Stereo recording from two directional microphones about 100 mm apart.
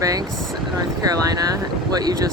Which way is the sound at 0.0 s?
35° right (ahead or behind).